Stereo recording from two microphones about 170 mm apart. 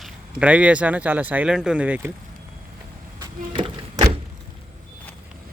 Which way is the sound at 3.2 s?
25° right (ahead or behind).